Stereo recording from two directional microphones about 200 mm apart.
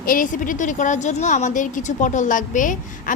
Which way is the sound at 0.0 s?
45° left (ahead or behind).